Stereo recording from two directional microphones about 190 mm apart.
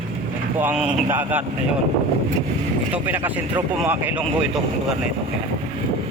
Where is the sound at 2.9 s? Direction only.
10° right (ahead or behind).